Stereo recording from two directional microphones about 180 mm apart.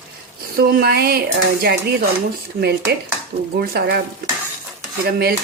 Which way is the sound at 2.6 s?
65° right (ahead or behind).